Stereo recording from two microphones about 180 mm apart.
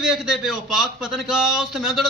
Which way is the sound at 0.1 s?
5° right (ahead or behind).